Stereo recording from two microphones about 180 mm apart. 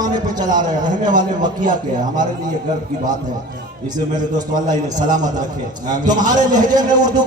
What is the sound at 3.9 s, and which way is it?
A man's voice, 20° right (ahead or behind).